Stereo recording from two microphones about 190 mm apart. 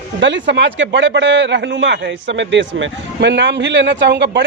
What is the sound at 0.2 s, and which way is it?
A man's voice, 70° right (ahead or behind).